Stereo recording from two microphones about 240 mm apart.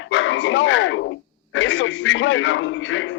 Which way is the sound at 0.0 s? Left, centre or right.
Left.